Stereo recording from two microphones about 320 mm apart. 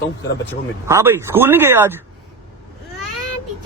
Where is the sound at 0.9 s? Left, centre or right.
Centre.